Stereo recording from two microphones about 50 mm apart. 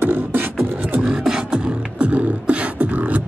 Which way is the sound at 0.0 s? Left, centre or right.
Right.